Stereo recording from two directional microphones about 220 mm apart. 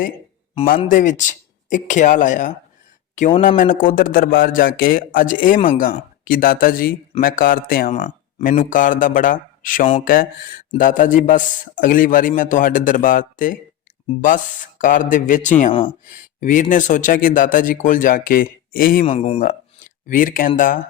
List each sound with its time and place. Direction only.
0.9 s a man's voice: 35° left (ahead or behind)
7.9 s a man's voice: 30° left (ahead or behind)
19.0 s speech: 25° left (ahead or behind)
19.5 s a sound: 40° left (ahead or behind)